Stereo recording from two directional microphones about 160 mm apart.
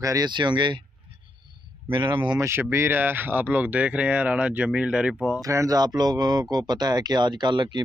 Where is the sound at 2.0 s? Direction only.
25° right (ahead or behind).